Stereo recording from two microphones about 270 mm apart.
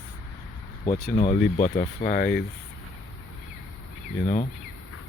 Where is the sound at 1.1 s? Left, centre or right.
Left.